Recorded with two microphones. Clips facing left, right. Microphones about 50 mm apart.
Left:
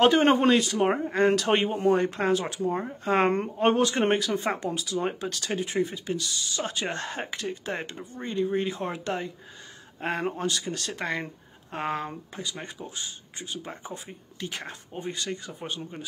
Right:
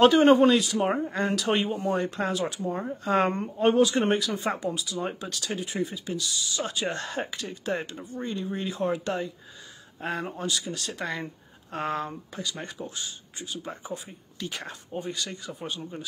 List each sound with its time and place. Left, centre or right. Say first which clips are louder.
0.0 s speech: right 2 dB; left
11.7 s speech: even; left